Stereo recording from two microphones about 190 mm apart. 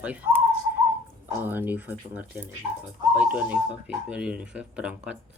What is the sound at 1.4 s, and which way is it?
Speech, 10° right (ahead or behind).